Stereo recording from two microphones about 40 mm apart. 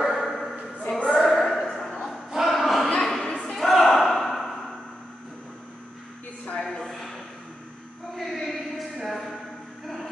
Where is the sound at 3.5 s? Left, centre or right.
Centre.